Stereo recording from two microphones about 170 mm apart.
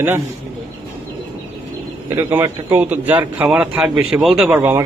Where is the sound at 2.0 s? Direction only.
15° right (ahead or behind).